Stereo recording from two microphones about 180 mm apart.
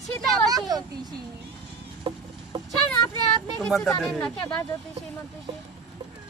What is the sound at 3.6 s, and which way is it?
Speech, centre (ahead or behind).